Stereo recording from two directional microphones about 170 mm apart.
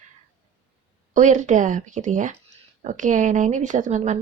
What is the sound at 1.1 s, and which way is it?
Speech, 45° right (ahead or behind).